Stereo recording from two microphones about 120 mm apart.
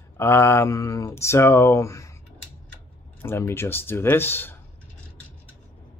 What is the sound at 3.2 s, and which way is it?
Speech, 20° left (ahead or behind).